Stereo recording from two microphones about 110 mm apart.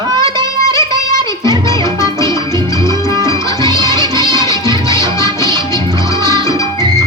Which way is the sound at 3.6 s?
30° left (ahead or behind).